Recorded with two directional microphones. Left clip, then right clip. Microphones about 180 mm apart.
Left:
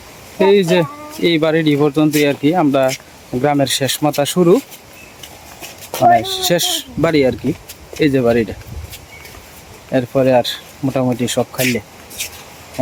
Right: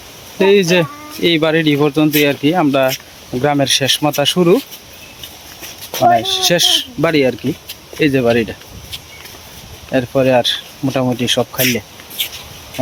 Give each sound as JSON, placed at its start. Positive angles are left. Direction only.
{"t": 0.3, "sound": "speech", "side_deg": 5}
{"t": 5.9, "sound": "speech", "side_deg": 5}
{"t": 9.9, "sound": "speech", "side_deg": 0}